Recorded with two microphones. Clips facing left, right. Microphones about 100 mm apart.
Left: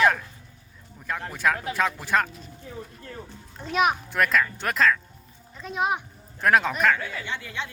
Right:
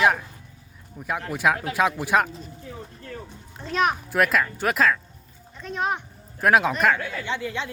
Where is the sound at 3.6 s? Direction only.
10° left (ahead or behind).